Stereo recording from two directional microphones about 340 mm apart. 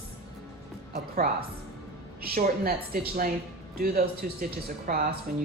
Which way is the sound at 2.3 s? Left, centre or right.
Right.